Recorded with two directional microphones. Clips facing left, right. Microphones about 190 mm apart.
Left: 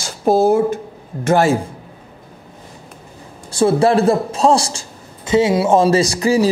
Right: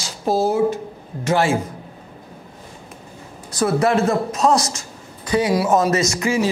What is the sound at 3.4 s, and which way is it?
A man's voice, 30° left (ahead or behind).